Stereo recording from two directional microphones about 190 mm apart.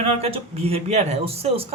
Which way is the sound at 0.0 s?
30° right (ahead or behind).